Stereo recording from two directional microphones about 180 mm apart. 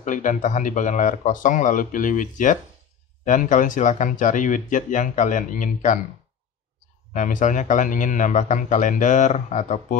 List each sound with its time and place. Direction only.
0.0 s a man's voice: 45° left (ahead or behind)
7.2 s a man's voice: 45° left (ahead or behind)